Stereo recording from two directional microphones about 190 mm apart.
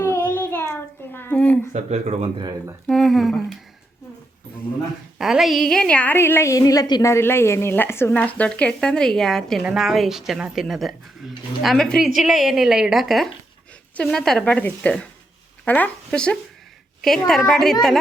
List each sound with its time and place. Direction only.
0.0 s child singing: 10° left (ahead or behind)
1.1 s a sound: 10° left (ahead or behind)
1.7 s speech: 35° right (ahead or behind)
2.4 s speech: 20° right (ahead or behind)
2.8 s speech: centre (ahead or behind)
5.1 s a woman's voice: centre (ahead or behind)